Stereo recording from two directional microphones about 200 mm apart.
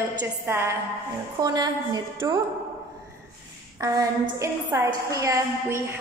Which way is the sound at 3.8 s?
15° right (ahead or behind).